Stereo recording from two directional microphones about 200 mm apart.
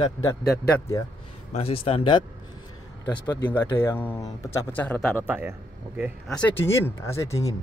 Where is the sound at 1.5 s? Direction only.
30° left (ahead or behind).